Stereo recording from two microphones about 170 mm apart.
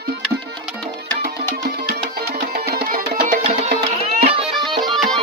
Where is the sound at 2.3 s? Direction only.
70° right (ahead or behind).